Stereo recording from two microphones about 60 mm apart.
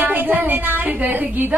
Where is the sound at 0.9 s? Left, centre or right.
Right.